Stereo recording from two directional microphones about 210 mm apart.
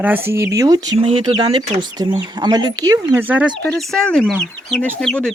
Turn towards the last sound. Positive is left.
turn(degrees=5)  # may be behind; listen again after turning